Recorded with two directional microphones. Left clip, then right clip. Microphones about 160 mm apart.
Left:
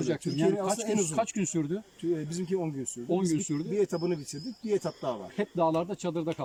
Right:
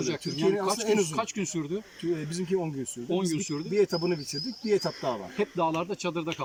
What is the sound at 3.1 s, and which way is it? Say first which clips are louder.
Speech: left 1 dB; 25° left (ahead or behind).